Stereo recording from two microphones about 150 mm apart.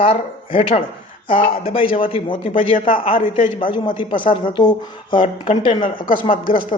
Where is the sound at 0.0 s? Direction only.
40° left (ahead or behind).